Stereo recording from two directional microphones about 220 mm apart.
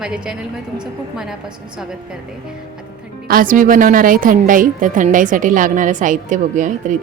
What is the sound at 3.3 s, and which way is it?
A woman's voice, 40° right (ahead or behind).